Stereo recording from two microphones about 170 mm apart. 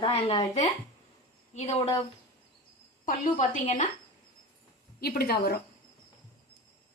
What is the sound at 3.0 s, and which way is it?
Speech, 55° left (ahead or behind).